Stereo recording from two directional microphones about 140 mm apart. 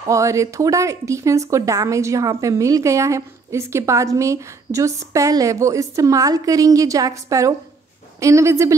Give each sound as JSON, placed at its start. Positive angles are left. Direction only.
{"t": 0.0, "sound": "speech", "side_deg": -20}